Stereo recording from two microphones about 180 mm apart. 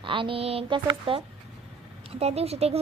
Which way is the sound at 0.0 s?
30° right (ahead or behind).